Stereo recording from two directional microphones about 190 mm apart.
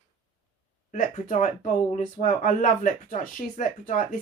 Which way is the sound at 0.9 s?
40° left (ahead or behind).